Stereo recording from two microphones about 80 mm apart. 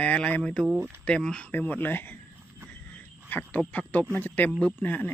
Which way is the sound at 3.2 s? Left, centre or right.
Left.